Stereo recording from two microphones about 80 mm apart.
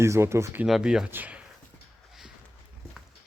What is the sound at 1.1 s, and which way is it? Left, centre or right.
Speech, right.